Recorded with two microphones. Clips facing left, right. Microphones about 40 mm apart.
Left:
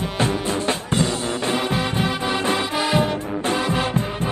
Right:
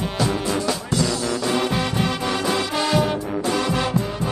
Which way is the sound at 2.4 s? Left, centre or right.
Left.